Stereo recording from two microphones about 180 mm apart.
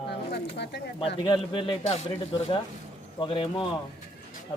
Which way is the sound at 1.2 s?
25° left (ahead or behind).